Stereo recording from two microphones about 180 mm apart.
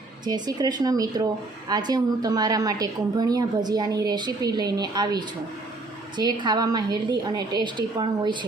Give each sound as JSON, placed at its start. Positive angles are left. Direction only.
{"t": 0.3, "sound": "speech", "side_deg": -20}